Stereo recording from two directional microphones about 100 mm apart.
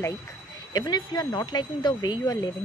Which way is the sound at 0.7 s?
40° left (ahead or behind).